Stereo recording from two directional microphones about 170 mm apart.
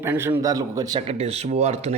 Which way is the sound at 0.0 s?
15° right (ahead or behind).